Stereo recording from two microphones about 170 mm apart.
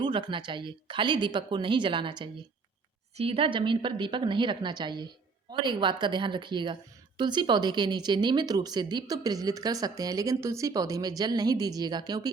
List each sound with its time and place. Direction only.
0.0 s speech: 30° right (ahead or behind)